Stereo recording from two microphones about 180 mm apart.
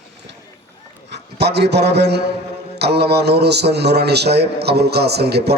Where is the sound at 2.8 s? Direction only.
65° right (ahead or behind).